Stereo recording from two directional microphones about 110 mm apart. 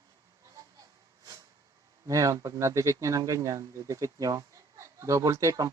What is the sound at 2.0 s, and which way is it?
Speech, 30° right (ahead or behind).